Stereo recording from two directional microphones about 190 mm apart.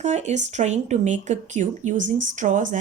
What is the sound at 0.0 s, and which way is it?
Speech, 40° right (ahead or behind).